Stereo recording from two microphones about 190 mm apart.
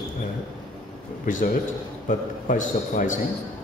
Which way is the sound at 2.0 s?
45° left (ahead or behind).